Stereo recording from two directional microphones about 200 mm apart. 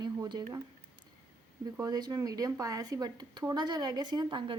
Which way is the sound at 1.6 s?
20° right (ahead or behind).